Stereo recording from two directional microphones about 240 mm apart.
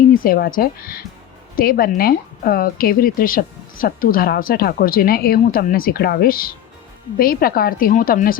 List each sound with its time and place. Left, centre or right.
0.1 s a woman's voice: left